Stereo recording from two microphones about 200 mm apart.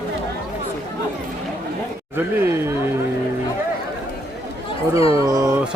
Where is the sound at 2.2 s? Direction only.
10° right (ahead or behind).